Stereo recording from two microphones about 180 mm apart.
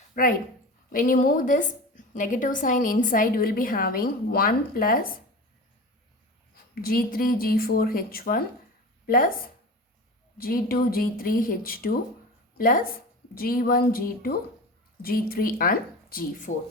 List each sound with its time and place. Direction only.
0.1 s a woman's voice: 50° left (ahead or behind)
6.8 s speech: 55° left (ahead or behind)
10.3 s a woman's voice: 55° left (ahead or behind)